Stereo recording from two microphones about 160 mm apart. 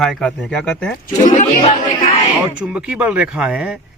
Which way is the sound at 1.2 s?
45° left (ahead or behind).